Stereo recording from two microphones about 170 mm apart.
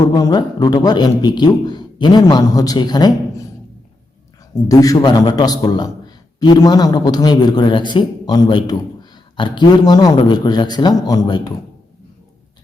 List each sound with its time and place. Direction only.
0.0 s a man's voice: 25° left (ahead or behind)
4.7 s a man's voice: 20° left (ahead or behind)